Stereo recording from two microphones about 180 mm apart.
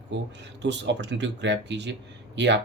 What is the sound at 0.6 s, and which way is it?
Speech, 75° right (ahead or behind).